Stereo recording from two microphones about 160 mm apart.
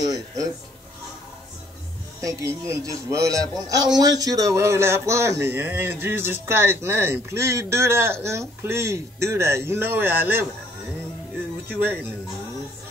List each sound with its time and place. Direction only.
0.0 s speech: 25° right (ahead or behind)
2.2 s speech: 20° right (ahead or behind)
11.7 s speech: 10° right (ahead or behind)